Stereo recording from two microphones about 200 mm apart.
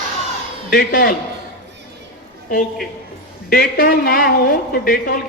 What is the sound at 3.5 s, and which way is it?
Speech, 50° left (ahead or behind).